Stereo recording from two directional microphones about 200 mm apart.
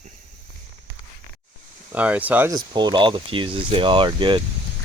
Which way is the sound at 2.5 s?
20° right (ahead or behind).